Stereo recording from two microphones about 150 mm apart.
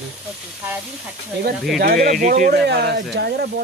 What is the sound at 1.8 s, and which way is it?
Speech, 70° right (ahead or behind).